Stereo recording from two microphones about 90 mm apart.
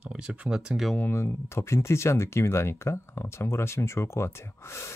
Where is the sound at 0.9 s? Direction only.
25° left (ahead or behind).